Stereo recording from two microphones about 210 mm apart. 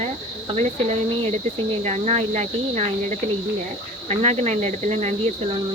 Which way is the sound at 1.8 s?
30° right (ahead or behind).